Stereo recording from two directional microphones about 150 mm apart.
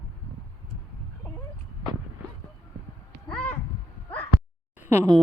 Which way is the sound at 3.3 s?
10° left (ahead or behind).